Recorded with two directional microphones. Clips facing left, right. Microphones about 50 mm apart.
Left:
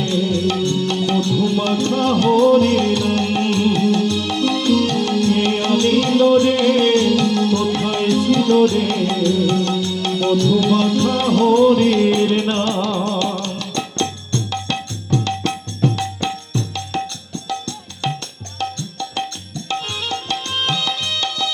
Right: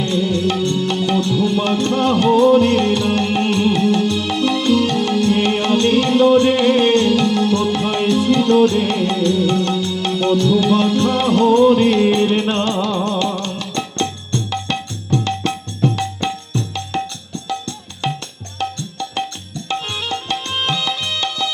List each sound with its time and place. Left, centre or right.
0.0 s music: right
18.0 s music: right